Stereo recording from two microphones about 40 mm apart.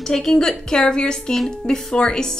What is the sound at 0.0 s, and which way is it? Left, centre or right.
A woman's voice, centre.